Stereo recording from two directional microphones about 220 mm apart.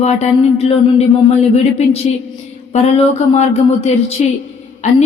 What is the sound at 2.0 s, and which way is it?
Speech, 30° left (ahead or behind).